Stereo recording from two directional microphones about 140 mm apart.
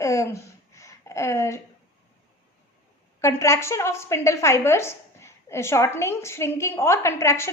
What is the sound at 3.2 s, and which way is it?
A woman's voice, 20° left (ahead or behind).